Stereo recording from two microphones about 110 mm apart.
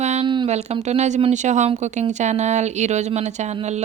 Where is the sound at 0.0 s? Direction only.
90° right.